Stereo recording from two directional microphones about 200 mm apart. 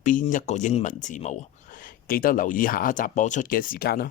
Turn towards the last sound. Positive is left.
turn(degrees=50)  # may be behind; listen again after turning